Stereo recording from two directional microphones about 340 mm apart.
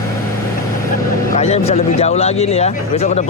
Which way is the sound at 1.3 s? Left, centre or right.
Centre.